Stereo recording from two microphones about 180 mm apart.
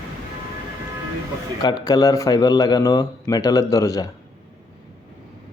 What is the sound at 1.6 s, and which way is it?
Speech, 20° left (ahead or behind).